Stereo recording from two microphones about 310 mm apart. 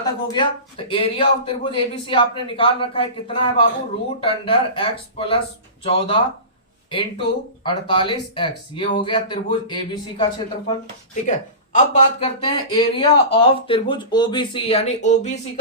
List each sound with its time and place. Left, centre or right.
0.0 s speech: centre